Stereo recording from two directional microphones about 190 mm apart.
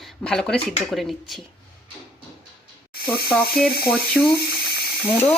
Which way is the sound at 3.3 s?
5° left (ahead or behind).